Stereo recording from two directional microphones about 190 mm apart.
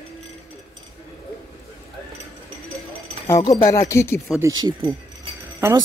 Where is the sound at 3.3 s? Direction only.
15° left (ahead or behind).